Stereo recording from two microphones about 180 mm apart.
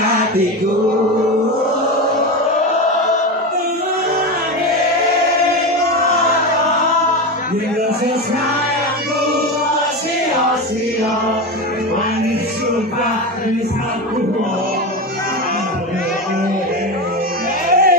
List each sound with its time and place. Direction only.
17.6 s music: 55° right (ahead or behind)